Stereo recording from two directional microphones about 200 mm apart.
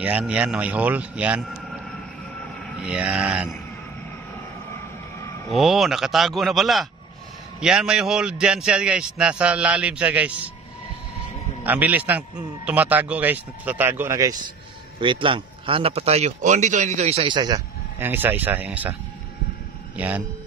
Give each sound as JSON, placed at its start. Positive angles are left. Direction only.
{"t": 0.0, "sound": "a man's voice", "side_deg": -5}
{"t": 5.5, "sound": "a man's voice", "side_deg": 0}
{"t": 11.6, "sound": "speech", "side_deg": -10}
{"t": 17.9, "sound": "speech", "side_deg": -10}
{"t": 20.0, "sound": "speech", "side_deg": -10}